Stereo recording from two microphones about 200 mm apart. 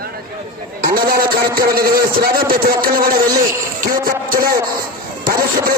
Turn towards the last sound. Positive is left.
turn(degrees=-45)  # may be behind; listen again after turning